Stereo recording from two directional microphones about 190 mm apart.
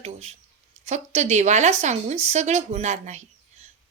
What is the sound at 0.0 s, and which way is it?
A woman's voice, 35° right (ahead or behind).